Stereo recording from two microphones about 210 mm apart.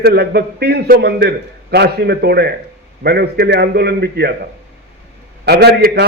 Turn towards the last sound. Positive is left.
turn(degrees=-50)  # may be behind; listen again after turning